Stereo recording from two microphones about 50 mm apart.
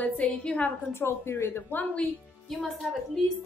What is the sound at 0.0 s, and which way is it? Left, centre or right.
Speech, left.